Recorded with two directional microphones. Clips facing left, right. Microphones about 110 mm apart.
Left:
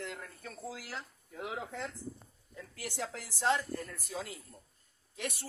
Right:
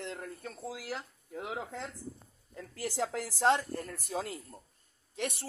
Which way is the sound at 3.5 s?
35° right (ahead or behind).